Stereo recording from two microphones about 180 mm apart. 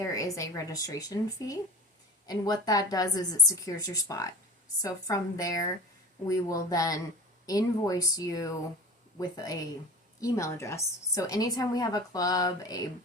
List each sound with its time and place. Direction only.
0.0 s speech: 20° left (ahead or behind)